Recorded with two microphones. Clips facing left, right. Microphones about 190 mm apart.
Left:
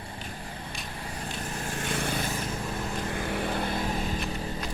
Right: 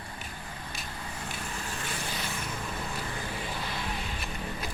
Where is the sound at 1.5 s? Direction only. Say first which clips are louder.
Left 5 dB; 45° left (ahead or behind).